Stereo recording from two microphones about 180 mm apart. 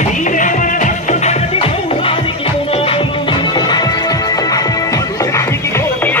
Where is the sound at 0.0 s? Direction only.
45° left (ahead or behind).